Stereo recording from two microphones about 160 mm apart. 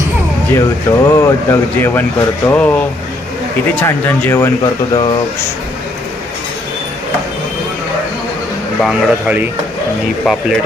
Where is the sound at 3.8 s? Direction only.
15° left (ahead or behind).